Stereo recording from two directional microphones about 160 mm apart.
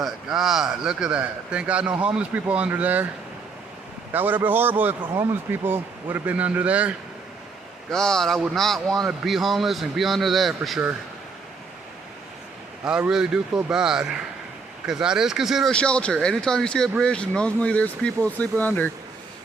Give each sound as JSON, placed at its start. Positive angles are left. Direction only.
{"t": 0.0, "sound": "speech", "side_deg": -5}
{"t": 4.1, "sound": "speech", "side_deg": -10}
{"t": 7.9, "sound": "speech", "side_deg": 5}
{"t": 12.8, "sound": "speech", "side_deg": -5}